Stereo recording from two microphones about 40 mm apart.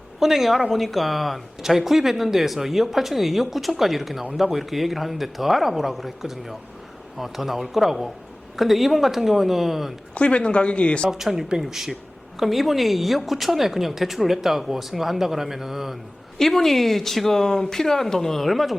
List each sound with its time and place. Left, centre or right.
0.2 s speech: centre
10.2 s speech: left
11.1 s speech: centre
16.4 s speech: centre